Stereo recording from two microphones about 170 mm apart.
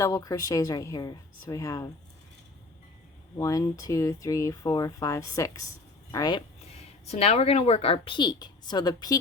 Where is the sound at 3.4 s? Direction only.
20° left (ahead or behind).